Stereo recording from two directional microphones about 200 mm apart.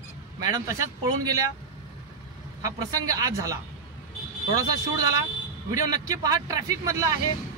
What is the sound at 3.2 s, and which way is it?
A man's voice, 15° right (ahead or behind).